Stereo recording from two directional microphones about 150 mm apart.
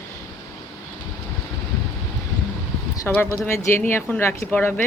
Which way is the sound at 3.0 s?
15° left (ahead or behind).